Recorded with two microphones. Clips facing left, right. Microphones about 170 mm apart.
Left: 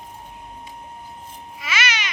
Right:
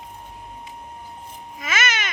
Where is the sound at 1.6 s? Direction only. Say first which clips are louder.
Right 1 dB; 45° right (ahead or behind).